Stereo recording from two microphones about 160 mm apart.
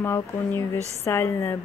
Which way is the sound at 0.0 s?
15° left (ahead or behind).